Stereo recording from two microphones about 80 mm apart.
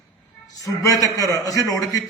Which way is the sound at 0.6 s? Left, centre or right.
Left.